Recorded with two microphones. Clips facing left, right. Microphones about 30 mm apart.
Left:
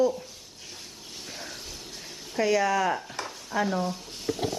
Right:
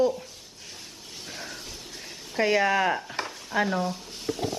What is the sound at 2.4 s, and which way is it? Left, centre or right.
Speech, right.